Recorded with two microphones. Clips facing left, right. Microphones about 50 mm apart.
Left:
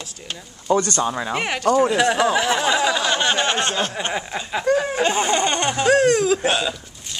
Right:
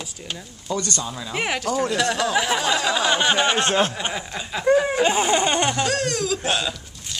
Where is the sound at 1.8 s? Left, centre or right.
Centre.